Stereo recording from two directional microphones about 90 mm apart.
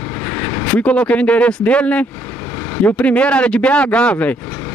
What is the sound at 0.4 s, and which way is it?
Speech, 20° left (ahead or behind).